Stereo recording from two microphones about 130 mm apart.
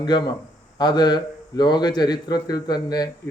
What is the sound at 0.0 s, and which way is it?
A man's voice, 35° left (ahead or behind).